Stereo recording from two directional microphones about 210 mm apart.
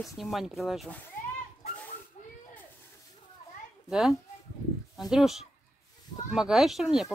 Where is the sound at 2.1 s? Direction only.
35° left (ahead or behind).